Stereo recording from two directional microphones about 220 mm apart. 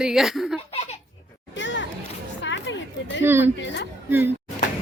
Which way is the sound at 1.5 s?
55° left (ahead or behind).